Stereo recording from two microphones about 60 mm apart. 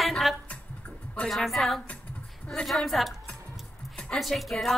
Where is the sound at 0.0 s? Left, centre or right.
Centre.